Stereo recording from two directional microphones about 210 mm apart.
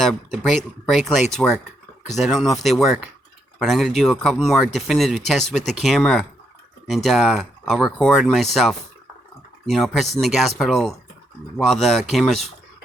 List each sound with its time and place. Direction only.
0.0 s speech: centre (ahead or behind)